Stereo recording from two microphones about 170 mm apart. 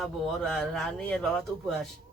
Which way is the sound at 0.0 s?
Centre (ahead or behind).